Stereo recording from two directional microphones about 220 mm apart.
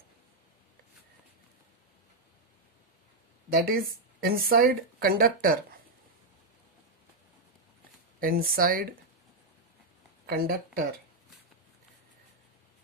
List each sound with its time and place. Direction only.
3.4 s speech: 40° right (ahead or behind)
8.2 s speech: 40° right (ahead or behind)
10.2 s speech: 45° right (ahead or behind)